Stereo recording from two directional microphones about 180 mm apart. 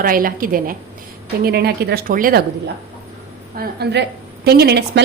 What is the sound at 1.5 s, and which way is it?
Speech, 60° right (ahead or behind).